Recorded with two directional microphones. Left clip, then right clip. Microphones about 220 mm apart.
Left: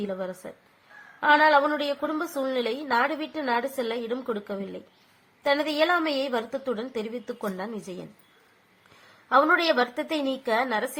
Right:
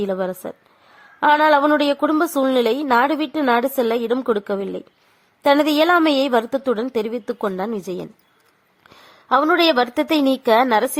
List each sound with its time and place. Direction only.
0.0 s a woman's voice: 45° right (ahead or behind)
9.3 s a woman's voice: 45° right (ahead or behind)